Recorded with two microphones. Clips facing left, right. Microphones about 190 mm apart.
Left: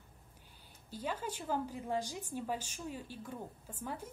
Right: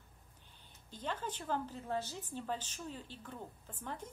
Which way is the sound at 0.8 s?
10° left (ahead or behind).